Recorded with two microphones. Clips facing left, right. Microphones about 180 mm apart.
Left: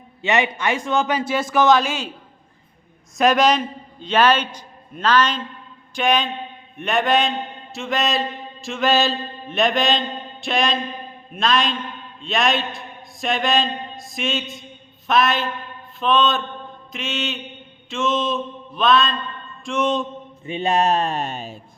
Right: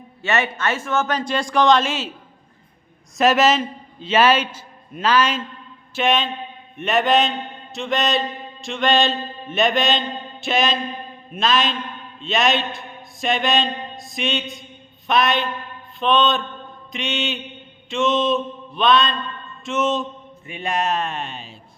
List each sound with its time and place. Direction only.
0.2 s a man's voice: 15° left (ahead or behind); by 2.0 s centre (ahead or behind)
3.2 s a man's voice: 5° right (ahead or behind)
20.5 s speech: 25° left (ahead or behind); by 21.6 s 45° left (ahead or behind)